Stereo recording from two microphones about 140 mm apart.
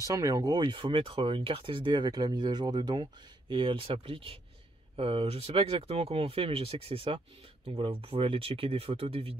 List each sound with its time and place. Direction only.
0.0 s speech: 25° right (ahead or behind); by 9.4 s 45° right (ahead or behind)